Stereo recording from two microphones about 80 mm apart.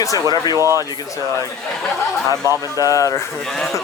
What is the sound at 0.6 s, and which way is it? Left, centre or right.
Speech, right.